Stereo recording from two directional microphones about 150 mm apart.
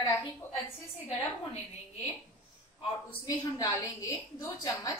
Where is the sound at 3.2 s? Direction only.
20° left (ahead or behind).